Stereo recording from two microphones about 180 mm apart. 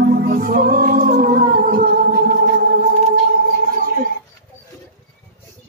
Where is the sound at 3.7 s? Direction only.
50° right (ahead or behind).